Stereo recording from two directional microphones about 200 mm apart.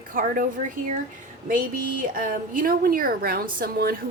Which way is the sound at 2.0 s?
45° right (ahead or behind).